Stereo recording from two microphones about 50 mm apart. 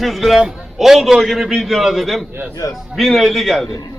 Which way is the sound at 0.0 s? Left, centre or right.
Centre.